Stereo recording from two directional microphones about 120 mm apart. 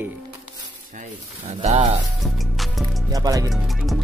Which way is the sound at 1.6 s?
65° right (ahead or behind).